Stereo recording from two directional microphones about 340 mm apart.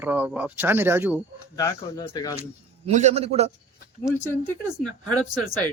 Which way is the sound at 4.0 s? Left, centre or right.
Centre.